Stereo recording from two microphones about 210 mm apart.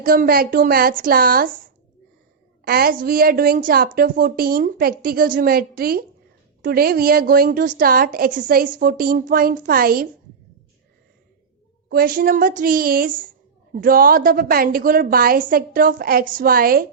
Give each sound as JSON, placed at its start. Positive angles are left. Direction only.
{"t": 0.0, "sound": "a woman's voice", "side_deg": -45}
{"t": 11.9, "sound": "a woman's voice", "side_deg": -45}